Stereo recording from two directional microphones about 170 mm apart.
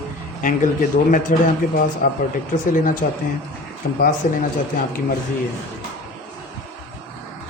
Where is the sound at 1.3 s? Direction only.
50° left (ahead or behind).